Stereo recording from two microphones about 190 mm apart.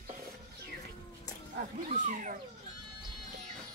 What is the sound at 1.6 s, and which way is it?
Speech, 40° right (ahead or behind).